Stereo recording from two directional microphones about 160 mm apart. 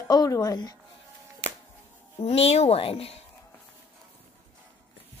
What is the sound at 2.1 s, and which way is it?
A woman's voice, 40° left (ahead or behind).